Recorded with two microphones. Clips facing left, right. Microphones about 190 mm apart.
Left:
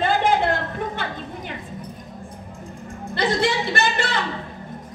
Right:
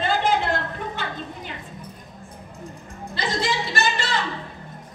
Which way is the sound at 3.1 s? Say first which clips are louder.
Left 5 dB; 60° left (ahead or behind).